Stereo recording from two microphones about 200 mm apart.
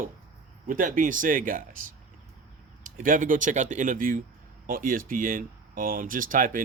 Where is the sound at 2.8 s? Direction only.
40° right (ahead or behind).